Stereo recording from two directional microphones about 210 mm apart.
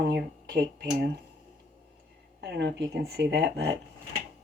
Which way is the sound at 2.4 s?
55° right (ahead or behind).